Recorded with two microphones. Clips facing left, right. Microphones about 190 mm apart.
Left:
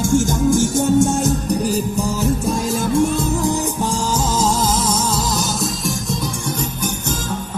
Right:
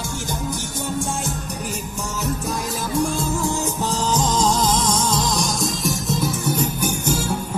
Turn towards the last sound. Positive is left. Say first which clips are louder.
# even
turn(degrees=0)  # may be behind; listen again after turning